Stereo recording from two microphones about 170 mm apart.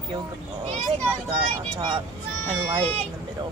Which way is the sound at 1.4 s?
25° right (ahead or behind).